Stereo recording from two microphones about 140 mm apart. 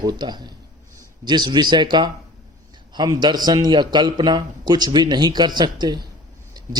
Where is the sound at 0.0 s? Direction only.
30° right (ahead or behind).